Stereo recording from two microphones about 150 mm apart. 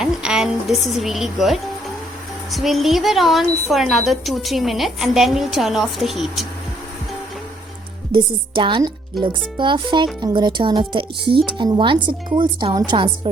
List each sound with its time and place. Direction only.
0.0 s speech: 5° right (ahead or behind)
8.1 s speech: 35° right (ahead or behind)